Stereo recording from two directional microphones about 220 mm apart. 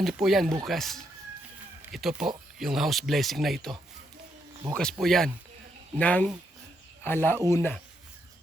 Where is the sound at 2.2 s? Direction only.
Centre (ahead or behind).